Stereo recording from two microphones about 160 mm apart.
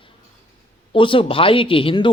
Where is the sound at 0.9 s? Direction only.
30° left (ahead or behind).